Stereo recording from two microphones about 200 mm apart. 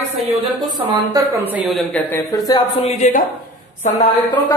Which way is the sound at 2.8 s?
35° left (ahead or behind).